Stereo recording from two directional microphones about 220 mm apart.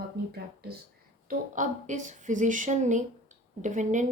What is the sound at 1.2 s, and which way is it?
A woman's voice, 35° right (ahead or behind).